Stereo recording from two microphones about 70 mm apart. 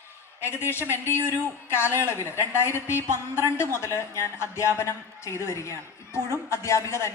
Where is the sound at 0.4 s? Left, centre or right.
Left.